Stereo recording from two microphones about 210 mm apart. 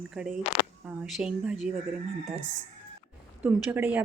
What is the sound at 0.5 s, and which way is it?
Speech, 25° left (ahead or behind).